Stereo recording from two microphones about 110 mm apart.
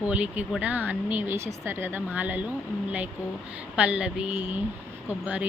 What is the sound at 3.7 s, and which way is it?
Speech, 10° right (ahead or behind).